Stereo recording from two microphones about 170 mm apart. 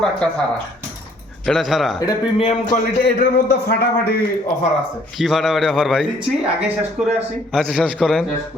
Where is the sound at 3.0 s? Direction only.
70° left (ahead or behind).